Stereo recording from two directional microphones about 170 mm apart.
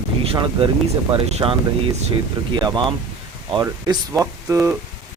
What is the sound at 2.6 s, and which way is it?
Speech, 25° right (ahead or behind).